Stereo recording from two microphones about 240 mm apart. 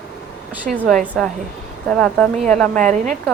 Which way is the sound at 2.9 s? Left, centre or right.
Right.